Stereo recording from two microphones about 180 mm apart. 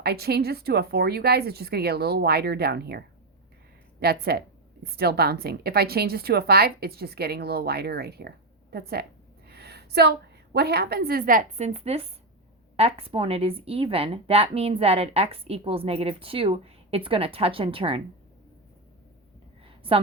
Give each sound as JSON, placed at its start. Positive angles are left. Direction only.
{"t": 0.0, "sound": "a woman's voice", "side_deg": -65}
{"t": 4.0, "sound": "a woman's voice", "side_deg": -60}
{"t": 19.6, "sound": "a sound", "side_deg": -30}